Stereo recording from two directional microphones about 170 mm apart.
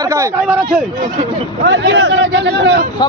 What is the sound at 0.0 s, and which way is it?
Speech, 20° right (ahead or behind).